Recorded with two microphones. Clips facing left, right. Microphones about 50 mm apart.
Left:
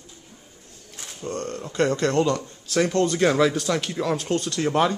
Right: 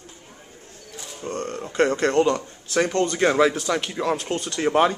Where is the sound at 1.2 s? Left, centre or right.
Right.